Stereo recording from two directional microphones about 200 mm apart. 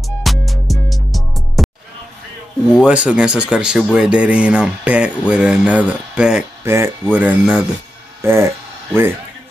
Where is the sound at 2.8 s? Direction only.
5° right (ahead or behind).